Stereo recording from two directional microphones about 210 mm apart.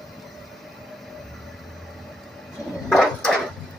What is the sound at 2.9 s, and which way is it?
Wood, centre (ahead or behind).